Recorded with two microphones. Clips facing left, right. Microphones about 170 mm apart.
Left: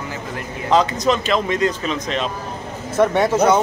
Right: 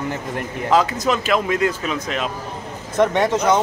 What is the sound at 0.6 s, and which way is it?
Speech, 5° right (ahead or behind).